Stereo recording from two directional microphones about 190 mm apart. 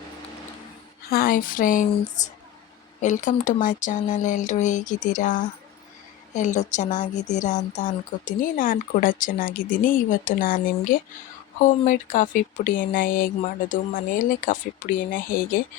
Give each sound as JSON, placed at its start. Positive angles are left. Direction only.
{"t": 1.1, "sound": "speech", "side_deg": 50}
{"t": 3.0, "sound": "speech", "side_deg": 40}